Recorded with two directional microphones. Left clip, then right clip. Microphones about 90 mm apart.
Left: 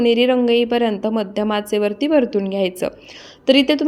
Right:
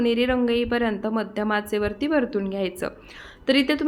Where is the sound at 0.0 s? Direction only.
25° left (ahead or behind).